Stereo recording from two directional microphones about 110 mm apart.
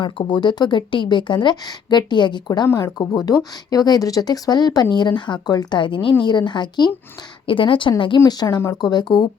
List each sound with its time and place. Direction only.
0.0 s speech: 45° left (ahead or behind)
2.6 s speech: 30° left (ahead or behind); by 8.2 s 50° left (ahead or behind)
8.2 s speech: 35° left (ahead or behind)